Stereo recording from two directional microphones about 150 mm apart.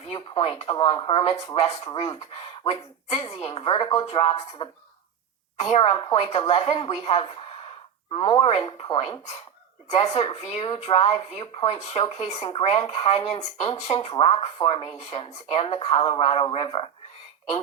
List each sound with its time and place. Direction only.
0.0 s a woman's voice: 40° left (ahead or behind)